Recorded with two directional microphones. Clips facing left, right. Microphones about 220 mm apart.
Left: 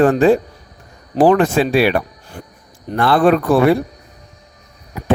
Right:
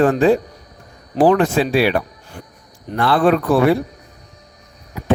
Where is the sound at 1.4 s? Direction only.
55° left (ahead or behind).